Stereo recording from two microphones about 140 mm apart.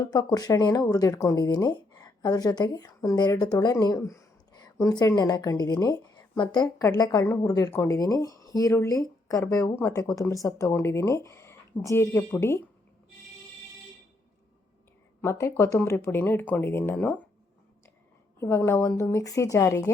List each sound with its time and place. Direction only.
0.0 s speech: 30° left (ahead or behind)
15.2 s speech: 20° left (ahead or behind)
18.3 s speech: 20° left (ahead or behind)